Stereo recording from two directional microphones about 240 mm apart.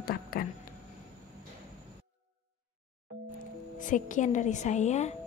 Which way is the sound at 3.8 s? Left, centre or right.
Left.